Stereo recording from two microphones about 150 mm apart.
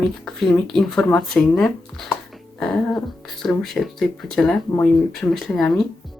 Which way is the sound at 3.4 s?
Centre (ahead or behind).